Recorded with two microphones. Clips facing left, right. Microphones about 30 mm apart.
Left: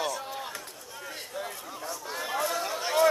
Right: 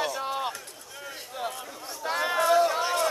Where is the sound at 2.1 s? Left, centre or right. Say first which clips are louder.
Right 9 dB; right.